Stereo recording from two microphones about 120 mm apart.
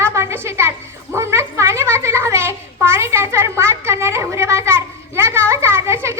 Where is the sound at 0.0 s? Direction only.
20° right (ahead or behind).